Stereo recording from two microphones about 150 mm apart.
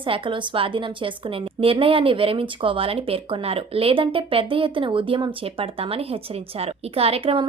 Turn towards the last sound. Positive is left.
turn(degrees=-40)  # may be behind; listen again after turning